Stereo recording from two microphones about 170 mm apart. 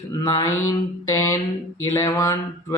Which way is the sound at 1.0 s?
20° left (ahead or behind).